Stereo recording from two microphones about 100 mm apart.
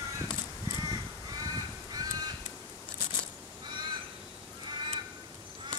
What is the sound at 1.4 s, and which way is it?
Crow, 40° right (ahead or behind).